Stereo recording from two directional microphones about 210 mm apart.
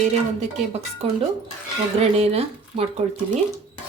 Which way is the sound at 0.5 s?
30° right (ahead or behind).